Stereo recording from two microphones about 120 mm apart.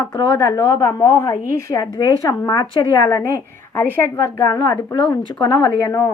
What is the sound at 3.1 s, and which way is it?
A woman's voice, 20° left (ahead or behind).